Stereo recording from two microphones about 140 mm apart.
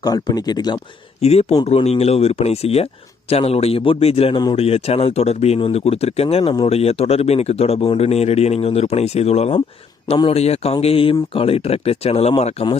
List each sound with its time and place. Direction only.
0.0 s speech: 25° left (ahead or behind)
1.2 s speech: 50° left (ahead or behind)